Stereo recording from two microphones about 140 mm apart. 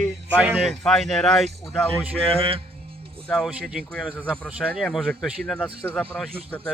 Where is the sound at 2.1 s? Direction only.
40° right (ahead or behind).